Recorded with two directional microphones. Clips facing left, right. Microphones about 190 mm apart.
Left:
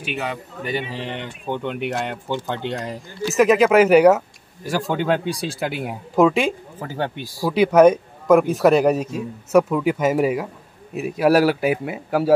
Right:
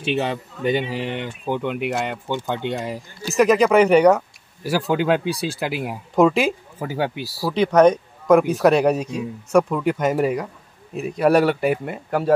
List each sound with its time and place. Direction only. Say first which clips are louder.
0.0 s speech: right 5 dB; 30° right (ahead or behind); by 7.5 s 5° right (ahead or behind)
7.5 s speech: left 2 dB; 10° left (ahead or behind)